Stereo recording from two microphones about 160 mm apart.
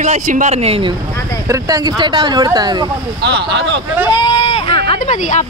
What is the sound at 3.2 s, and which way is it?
Speech, 90° right.